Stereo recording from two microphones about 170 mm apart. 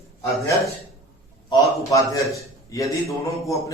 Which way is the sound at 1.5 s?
20° left (ahead or behind).